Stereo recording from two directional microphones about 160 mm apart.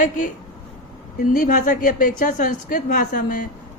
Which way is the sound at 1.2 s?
60° left (ahead or behind).